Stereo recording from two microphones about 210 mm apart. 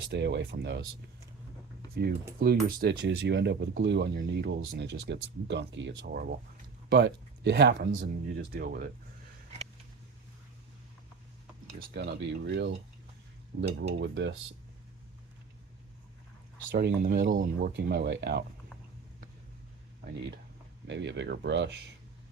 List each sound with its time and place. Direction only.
0.0 s speech: 55° right (ahead or behind)
2.0 s speech: 50° right (ahead or behind)
11.9 s speech: 55° right (ahead or behind)
16.7 s speech: 45° right (ahead or behind)
20.8 s speech: 55° right (ahead or behind)